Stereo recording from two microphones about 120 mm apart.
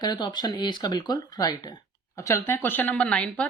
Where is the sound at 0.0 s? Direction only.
35° left (ahead or behind); by 3.5 s 10° left (ahead or behind).